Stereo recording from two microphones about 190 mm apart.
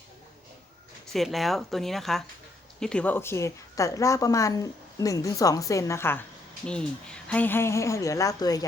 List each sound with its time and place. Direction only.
1.1 s a woman's voice: centre (ahead or behind); by 8.6 s 20° left (ahead or behind)